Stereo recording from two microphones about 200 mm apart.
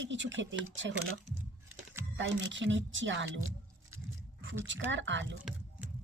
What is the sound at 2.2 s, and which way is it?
Speech, 70° right (ahead or behind).